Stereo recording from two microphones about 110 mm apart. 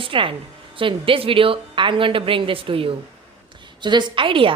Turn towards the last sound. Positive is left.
turn(degrees=-50)  # may be behind; listen again after turning